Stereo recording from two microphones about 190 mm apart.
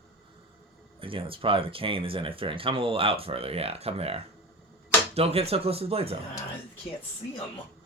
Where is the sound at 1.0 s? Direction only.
30° right (ahead or behind).